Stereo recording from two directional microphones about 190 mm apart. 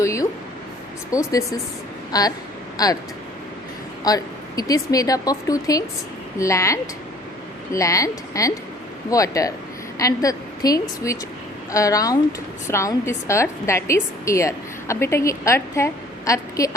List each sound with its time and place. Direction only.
0.0 s a sound: 15° left (ahead or behind)
1.1 s a woman's voice: 15° left (ahead or behind)
4.0 s a woman's voice: 20° left (ahead or behind)